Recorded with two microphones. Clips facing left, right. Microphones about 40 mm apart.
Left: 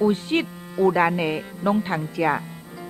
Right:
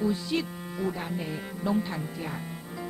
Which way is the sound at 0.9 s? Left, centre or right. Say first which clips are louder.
Left 13 dB; left.